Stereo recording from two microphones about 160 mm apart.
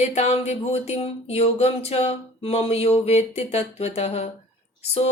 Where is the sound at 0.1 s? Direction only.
45° left (ahead or behind).